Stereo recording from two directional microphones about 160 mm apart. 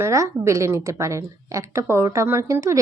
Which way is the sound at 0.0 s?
20° right (ahead or behind).